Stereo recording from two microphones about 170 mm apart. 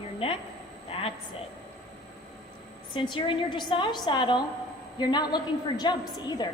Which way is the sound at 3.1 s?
30° left (ahead or behind).